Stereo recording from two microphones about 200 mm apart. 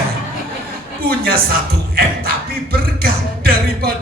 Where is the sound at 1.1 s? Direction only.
50° right (ahead or behind).